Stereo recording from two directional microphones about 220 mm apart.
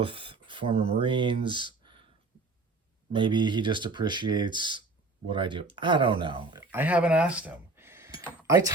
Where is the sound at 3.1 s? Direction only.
20° right (ahead or behind).